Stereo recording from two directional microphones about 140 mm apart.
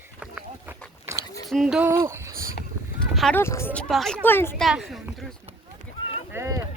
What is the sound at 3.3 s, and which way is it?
Speech, 20° left (ahead or behind).